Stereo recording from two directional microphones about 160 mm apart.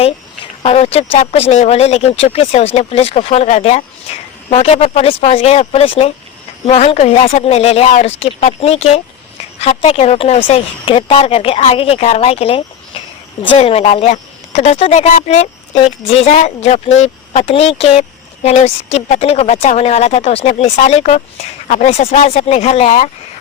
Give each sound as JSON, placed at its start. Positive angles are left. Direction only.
{"t": 0.6, "sound": "speech", "side_deg": 40}